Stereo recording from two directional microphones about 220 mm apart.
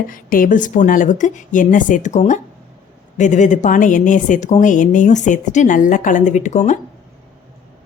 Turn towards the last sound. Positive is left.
turn(degrees=30)  # may be behind; listen again after turning